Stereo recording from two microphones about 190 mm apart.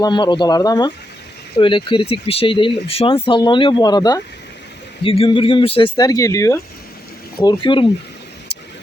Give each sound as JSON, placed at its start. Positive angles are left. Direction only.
{"t": 0.0, "sound": "speech", "side_deg": 25}